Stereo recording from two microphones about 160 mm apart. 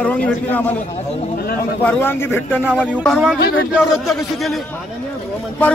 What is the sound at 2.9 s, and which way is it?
Speech, centre (ahead or behind).